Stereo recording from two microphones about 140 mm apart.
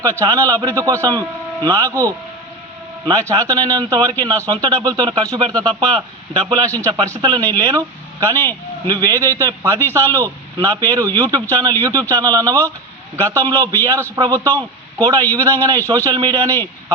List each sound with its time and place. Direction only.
0.0 s a man's voice: 20° right (ahead or behind)